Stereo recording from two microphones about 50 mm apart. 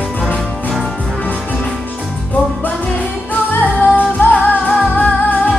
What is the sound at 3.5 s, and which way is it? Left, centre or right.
Music, left.